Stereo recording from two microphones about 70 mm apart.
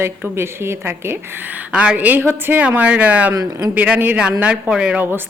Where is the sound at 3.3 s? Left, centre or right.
Right.